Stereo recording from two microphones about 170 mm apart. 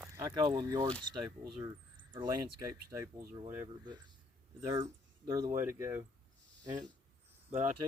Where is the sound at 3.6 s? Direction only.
25° right (ahead or behind).